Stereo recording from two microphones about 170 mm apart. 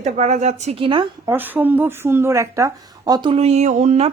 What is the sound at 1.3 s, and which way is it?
Speech, 10° right (ahead or behind).